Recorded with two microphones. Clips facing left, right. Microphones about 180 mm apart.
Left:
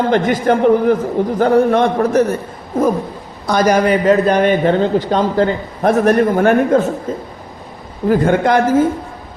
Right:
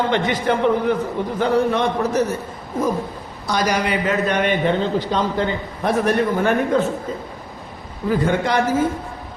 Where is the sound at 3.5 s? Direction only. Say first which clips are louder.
Left 8 dB; 50° left (ahead or behind).